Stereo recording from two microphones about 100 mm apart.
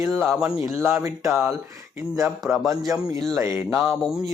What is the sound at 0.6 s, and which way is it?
Speech, 25° right (ahead or behind).